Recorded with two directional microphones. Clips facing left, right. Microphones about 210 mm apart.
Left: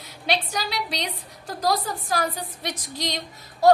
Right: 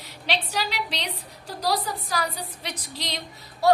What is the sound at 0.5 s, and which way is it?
A woman's voice, 45° left (ahead or behind).